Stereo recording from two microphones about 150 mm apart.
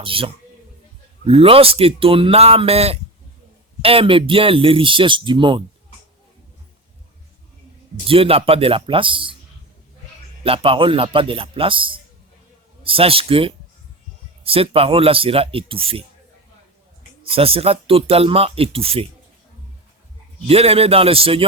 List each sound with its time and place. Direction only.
0.0 s speech: 35° right (ahead or behind)
8.0 s speech: 40° right (ahead or behind)
10.4 s speech: 40° right (ahead or behind)
17.2 s speech: 40° right (ahead or behind)
20.5 s speech: 40° right (ahead or behind)